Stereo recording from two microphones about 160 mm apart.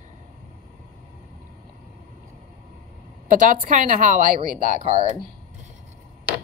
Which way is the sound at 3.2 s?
55° right (ahead or behind).